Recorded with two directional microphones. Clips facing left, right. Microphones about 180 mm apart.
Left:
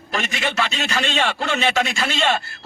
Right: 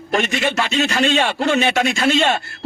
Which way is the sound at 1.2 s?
15° right (ahead or behind).